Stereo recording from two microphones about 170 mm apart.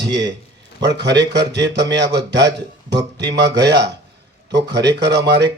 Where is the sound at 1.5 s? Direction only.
90° right.